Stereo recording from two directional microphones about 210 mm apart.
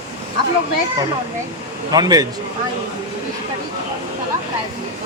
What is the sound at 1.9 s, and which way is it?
Speech, 20° right (ahead or behind).